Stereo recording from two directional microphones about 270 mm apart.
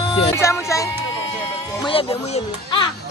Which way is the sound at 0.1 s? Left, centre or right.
Centre.